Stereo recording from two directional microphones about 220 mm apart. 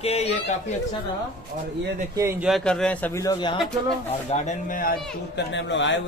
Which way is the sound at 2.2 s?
10° right (ahead or behind).